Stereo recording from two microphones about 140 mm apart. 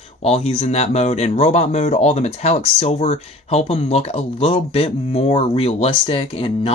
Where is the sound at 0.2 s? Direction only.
45° left (ahead or behind).